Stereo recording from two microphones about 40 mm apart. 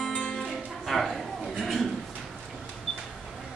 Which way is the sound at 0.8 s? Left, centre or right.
Centre.